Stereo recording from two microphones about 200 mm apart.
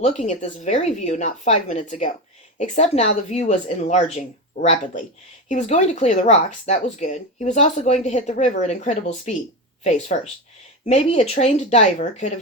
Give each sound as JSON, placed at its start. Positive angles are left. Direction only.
{"t": 0.0, "sound": "speech", "side_deg": 35}